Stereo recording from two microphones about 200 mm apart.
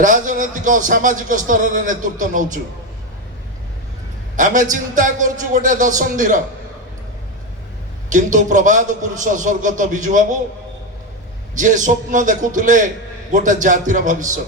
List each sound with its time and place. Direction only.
0.0 s a man's voice: 40° right (ahead or behind)
4.4 s a man's voice: 40° right (ahead or behind)
8.1 s a man's voice: 40° right (ahead or behind)
11.5 s a man's voice: 40° right (ahead or behind)